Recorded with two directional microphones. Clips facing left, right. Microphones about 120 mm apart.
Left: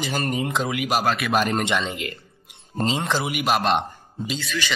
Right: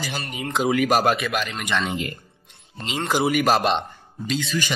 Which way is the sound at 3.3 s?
40° right (ahead or behind).